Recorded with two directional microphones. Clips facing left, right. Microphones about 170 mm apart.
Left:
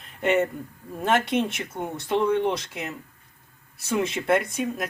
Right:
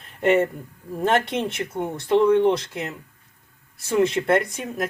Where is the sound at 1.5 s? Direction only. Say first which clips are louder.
Right 4 dB; centre (ahead or behind).